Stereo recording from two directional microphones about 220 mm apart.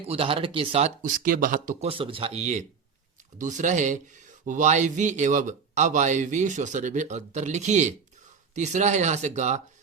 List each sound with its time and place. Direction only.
0.0 s speech: 25° right (ahead or behind)